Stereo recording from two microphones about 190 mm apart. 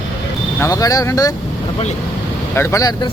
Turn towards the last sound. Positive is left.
turn(degrees=20)  # may be behind; listen again after turning